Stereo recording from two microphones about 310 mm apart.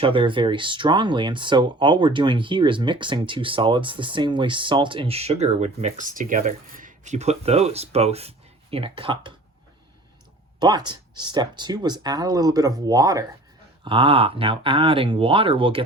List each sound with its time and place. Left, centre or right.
0.0 s speech: centre
10.6 s speech: centre